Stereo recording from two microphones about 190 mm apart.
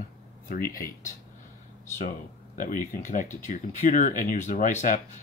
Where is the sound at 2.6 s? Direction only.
45° left (ahead or behind).